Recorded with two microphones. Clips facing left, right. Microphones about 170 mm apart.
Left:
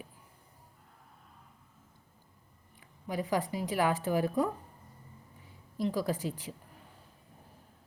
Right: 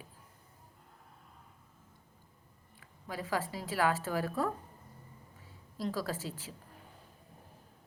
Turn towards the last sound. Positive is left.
turn(degrees=15)  # may be behind; listen again after turning